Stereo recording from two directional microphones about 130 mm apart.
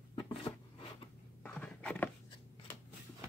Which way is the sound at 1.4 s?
10° left (ahead or behind).